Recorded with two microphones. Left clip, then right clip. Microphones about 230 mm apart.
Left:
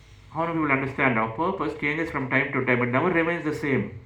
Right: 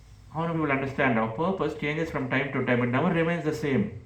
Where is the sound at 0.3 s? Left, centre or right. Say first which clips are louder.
Left 3 dB; right.